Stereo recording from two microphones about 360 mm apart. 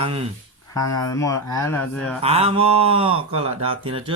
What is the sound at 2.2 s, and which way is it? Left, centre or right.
Speech, centre.